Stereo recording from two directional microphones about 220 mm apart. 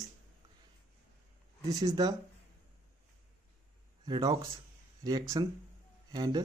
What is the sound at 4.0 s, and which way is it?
Speech, 15° right (ahead or behind).